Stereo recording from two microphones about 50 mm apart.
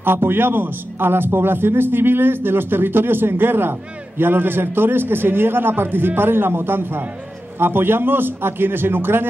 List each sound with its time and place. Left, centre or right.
0.0 s a man's voice: right